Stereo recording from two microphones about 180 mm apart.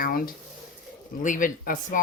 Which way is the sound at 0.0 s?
55° left (ahead or behind).